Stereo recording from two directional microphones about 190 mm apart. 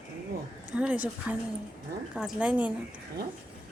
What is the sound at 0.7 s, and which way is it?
A woman's voice, 5° right (ahead or behind).